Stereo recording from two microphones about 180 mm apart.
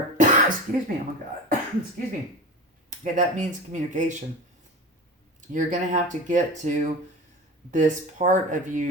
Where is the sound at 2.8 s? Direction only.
45° right (ahead or behind).